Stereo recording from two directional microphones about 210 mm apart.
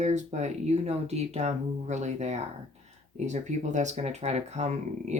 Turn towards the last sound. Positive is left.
turn(degrees=-30)  # may be behind; listen again after turning